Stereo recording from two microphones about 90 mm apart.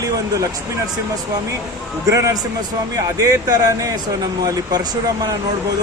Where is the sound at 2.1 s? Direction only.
35° right (ahead or behind).